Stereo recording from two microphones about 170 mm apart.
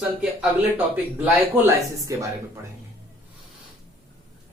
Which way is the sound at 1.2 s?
15° right (ahead or behind).